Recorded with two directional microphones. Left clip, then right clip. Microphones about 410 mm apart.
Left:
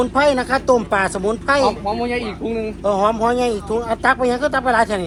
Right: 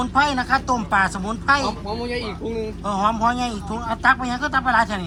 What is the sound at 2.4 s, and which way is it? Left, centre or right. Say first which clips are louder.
Speech: left 4 dB; left.